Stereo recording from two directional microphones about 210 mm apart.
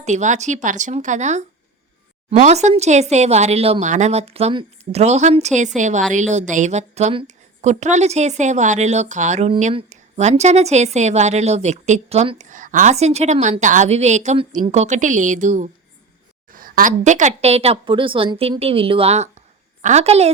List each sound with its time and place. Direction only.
0.0 s a woman's voice: 35° right (ahead or behind)